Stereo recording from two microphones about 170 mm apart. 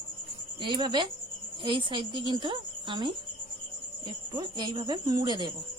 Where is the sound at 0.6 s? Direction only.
25° right (ahead or behind).